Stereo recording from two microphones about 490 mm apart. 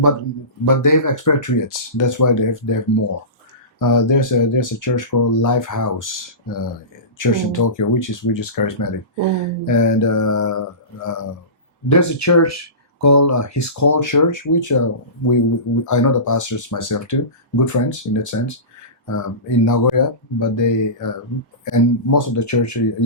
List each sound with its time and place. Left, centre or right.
0.6 s speech: left